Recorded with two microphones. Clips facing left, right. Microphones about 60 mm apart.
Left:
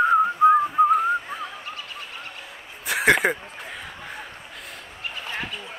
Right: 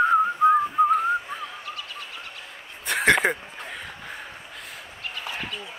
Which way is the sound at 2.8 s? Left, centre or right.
Centre.